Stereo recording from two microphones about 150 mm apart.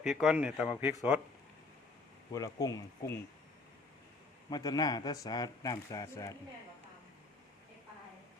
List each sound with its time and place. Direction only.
0.0 s speech: centre (ahead or behind)
2.3 s speech: 25° left (ahead or behind)
4.4 s speech: 25° left (ahead or behind)